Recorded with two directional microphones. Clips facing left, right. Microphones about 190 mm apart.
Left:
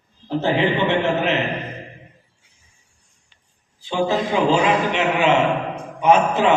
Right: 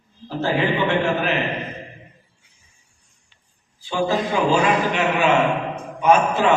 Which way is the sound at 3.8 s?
20° left (ahead or behind).